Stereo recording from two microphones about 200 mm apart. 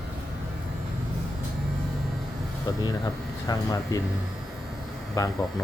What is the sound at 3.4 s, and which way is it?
Speech, 20° left (ahead or behind).